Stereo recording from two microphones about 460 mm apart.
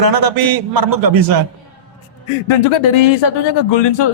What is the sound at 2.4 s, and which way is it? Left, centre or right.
Speech, left.